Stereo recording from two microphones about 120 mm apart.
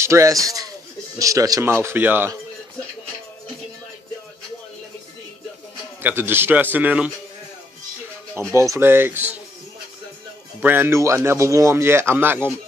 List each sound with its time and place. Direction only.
0.0 s speech: 25° right (ahead or behind)
6.0 s a man's voice: 20° right (ahead or behind)
8.5 s speech: 25° right (ahead or behind)
10.6 s speech: 15° right (ahead or behind)